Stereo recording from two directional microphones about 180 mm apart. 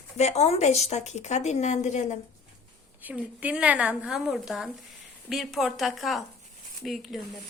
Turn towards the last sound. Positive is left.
turn(degrees=0)  # may be behind; listen again after turning